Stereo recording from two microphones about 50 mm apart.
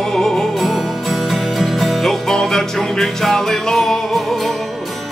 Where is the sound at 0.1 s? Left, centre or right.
Centre.